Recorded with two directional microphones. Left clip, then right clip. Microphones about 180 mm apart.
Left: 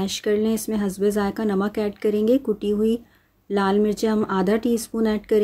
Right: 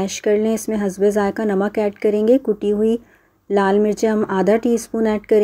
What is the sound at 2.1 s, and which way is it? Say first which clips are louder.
Speech: right 4 dB; 50° left (ahead or behind).